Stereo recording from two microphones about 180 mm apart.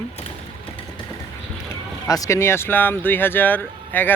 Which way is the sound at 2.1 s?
20° left (ahead or behind).